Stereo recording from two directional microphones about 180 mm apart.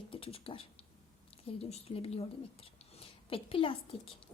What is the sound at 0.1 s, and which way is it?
A woman's voice, 30° left (ahead or behind).